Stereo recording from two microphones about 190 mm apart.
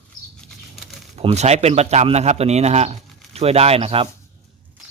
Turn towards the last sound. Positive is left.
turn(degrees=-30)  # may be behind; listen again after turning